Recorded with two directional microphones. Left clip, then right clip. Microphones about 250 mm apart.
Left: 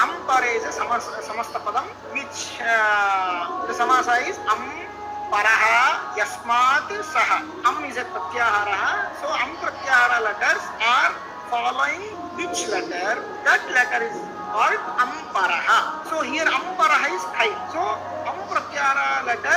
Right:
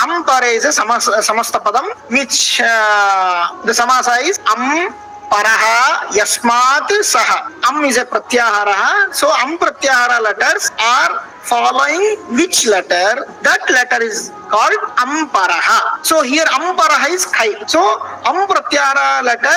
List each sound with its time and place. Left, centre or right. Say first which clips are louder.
0.0 s a man's voice: right 8 dB; right
11.5 s a woman's voice: right 11 dB; right
11.8 s a man's voice: right 11 dB; right